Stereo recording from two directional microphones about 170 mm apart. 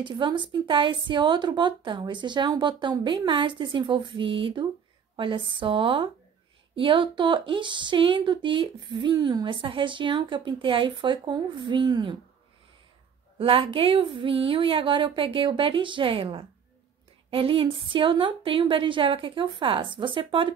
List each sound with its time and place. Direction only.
0.0 s a woman's voice: 25° right (ahead or behind)
13.4 s a woman's voice: 35° right (ahead or behind)